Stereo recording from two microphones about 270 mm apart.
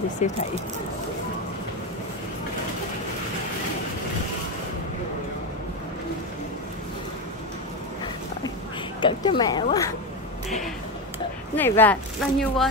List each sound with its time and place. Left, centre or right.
0.2 s speech: left
9.0 s speech: centre
11.5 s speech: centre